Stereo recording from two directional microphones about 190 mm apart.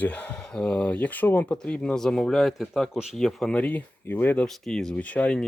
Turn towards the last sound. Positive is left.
turn(degrees=5)  # may be behind; listen again after turning